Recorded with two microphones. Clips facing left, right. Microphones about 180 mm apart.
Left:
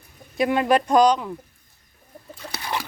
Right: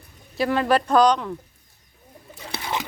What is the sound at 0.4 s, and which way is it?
Speech, 10° left (ahead or behind).